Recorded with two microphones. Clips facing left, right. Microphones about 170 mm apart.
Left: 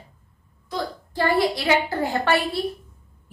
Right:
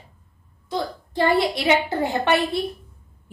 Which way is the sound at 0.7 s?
20° right (ahead or behind).